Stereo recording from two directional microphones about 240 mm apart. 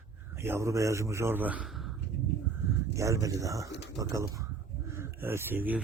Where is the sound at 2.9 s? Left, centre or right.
Centre.